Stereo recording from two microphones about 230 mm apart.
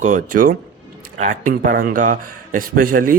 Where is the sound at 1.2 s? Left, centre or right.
Right.